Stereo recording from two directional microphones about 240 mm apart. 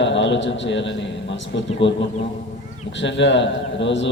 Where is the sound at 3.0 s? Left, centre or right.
Left.